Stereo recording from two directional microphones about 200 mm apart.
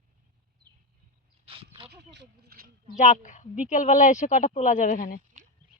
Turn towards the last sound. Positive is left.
turn(degrees=40)  # may be behind; listen again after turning